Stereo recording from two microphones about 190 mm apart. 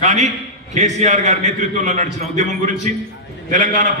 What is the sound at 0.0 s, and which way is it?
A man's voice, 35° right (ahead or behind).